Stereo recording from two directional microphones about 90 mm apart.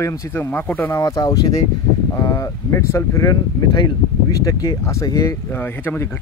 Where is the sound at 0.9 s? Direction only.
40° left (ahead or behind).